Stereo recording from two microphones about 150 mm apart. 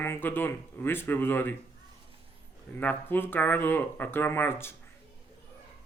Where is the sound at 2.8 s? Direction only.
10° left (ahead or behind).